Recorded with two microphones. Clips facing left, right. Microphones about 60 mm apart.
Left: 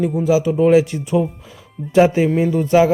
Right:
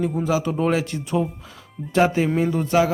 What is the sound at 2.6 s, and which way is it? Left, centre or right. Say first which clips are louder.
Speech: left 7 dB; left.